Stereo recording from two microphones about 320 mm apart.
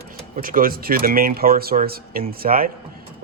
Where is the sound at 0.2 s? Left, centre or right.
Right.